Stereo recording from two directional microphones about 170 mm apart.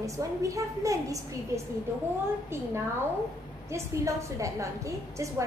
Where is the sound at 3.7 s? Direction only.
15° right (ahead or behind).